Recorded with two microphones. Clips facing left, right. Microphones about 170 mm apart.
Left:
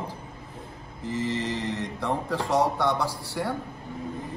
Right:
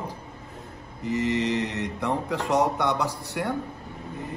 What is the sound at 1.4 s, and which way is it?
Mantra, 65° right (ahead or behind).